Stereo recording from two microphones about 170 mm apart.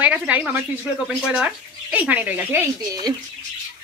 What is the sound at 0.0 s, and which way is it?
A woman's voice, 10° right (ahead or behind).